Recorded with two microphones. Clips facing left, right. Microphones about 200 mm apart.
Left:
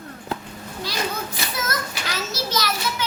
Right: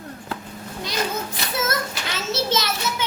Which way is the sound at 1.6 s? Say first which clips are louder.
Right 3 dB; 25° right (ahead or behind).